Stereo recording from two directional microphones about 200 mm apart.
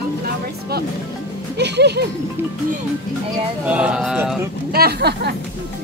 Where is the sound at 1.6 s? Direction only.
55° right (ahead or behind).